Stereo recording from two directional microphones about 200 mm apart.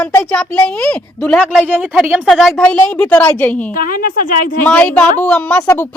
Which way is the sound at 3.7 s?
45° left (ahead or behind).